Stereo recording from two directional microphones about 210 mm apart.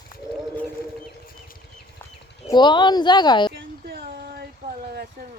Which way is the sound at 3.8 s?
50° right (ahead or behind).